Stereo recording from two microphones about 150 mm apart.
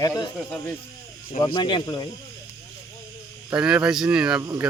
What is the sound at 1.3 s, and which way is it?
Speech, 35° left (ahead or behind).